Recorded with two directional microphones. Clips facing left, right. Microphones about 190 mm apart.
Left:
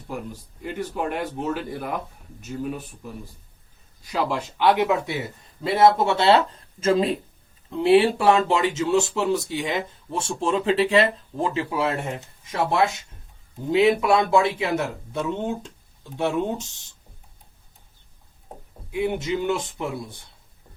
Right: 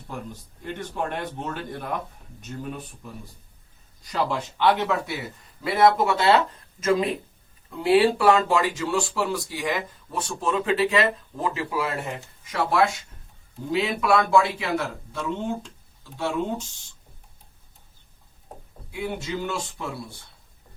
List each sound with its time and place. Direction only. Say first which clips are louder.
0.6 s speech: left 3 dB; 5° left (ahead or behind)
5.6 s speech: left 2 dB; 25° left (ahead or behind)
18.9 s speech: left 6 dB; 20° left (ahead or behind)